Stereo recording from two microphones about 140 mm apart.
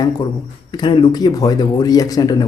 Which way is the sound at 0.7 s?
35° left (ahead or behind).